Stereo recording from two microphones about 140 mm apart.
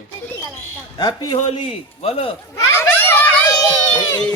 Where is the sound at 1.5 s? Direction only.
45° left (ahead or behind).